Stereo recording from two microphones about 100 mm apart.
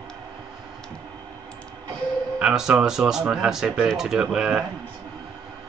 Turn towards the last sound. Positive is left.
turn(degrees=-10)  # may be behind; listen again after turning